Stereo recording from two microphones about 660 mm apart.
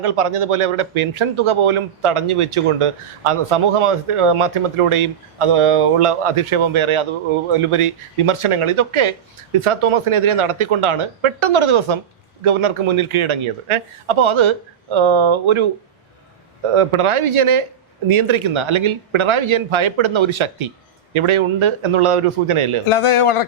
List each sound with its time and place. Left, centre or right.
0.0 s speech: right
16.7 s speech: right
22.9 s speech: left